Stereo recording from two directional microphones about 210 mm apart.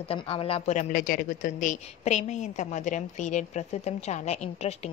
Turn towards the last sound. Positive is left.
turn(degrees=30)  # may be behind; listen again after turning